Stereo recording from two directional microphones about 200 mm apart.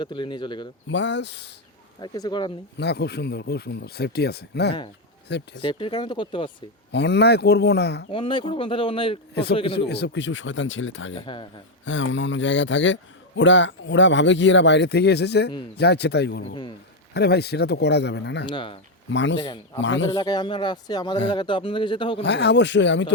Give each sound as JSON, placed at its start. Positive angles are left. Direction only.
{"t": 0.0, "sound": "speech", "side_deg": 25}
{"t": 0.9, "sound": "speech", "side_deg": 65}
{"t": 2.0, "sound": "speech", "side_deg": 20}
{"t": 2.7, "sound": "speech", "side_deg": 55}
{"t": 5.6, "sound": "speech", "side_deg": 25}
{"t": 6.9, "sound": "speech", "side_deg": 60}
{"t": 8.1, "sound": "speech", "side_deg": 25}
{"t": 9.3, "sound": "a man's voice", "side_deg": 55}
{"t": 11.1, "sound": "speech", "side_deg": 25}
{"t": 11.9, "sound": "a man's voice", "side_deg": 70}
{"t": 18.4, "sound": "speech", "side_deg": 25}
{"t": 19.1, "sound": "a man's voice", "side_deg": 60}
{"t": 20.1, "sound": "speech", "side_deg": 20}
{"t": 22.2, "sound": "speech", "side_deg": 60}